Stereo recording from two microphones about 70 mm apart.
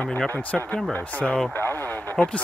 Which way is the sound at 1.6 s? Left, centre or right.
Left.